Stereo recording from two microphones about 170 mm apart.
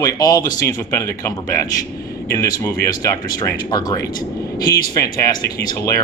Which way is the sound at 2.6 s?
20° left (ahead or behind).